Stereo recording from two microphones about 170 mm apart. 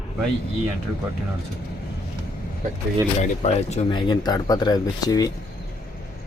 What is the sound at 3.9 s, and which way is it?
Speech, 25° left (ahead or behind).